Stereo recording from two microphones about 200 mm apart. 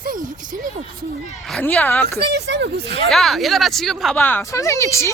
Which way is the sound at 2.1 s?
55° right (ahead or behind).